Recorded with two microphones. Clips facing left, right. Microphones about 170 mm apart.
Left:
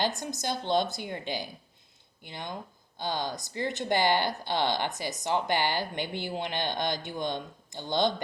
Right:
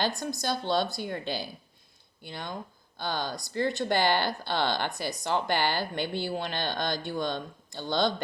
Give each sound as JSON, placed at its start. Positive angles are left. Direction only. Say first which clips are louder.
{"t": 0.0, "sound": "speech", "louder": "right 1 dB", "side_deg": 20}